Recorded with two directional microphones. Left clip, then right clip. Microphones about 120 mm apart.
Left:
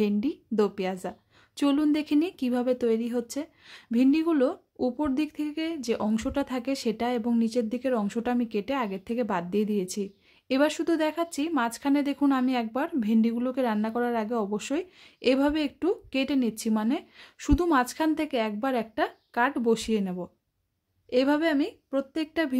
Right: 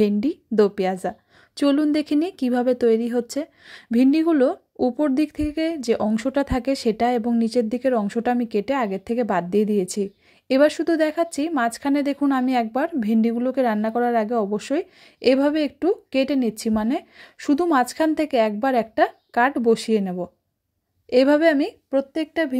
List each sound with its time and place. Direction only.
0.0 s a woman's voice: 35° right (ahead or behind)
17.6 s a woman's voice: 35° right (ahead or behind)
22.1 s speech: 15° right (ahead or behind)